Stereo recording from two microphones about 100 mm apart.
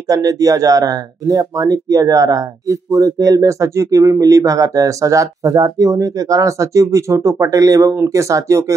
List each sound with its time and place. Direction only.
0.1 s speech: 35° right (ahead or behind)